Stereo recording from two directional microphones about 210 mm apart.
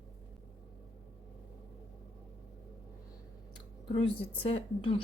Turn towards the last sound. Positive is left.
turn(degrees=25)  # may be behind; listen again after turning